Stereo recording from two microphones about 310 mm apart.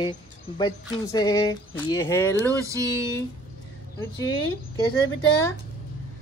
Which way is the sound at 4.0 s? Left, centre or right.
Centre.